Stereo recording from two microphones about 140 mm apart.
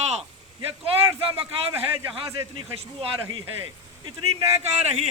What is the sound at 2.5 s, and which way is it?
Speech, 40° right (ahead or behind).